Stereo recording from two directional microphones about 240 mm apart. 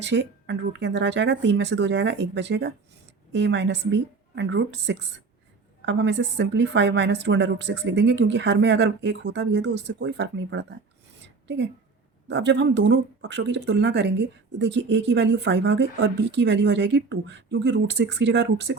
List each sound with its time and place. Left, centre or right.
0.0 s a woman's voice: right